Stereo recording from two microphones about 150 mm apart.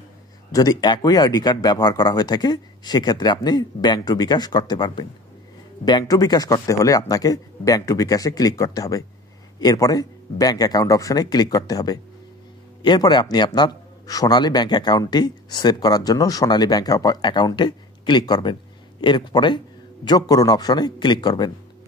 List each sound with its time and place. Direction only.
0.5 s a man's voice: 25° left (ahead or behind)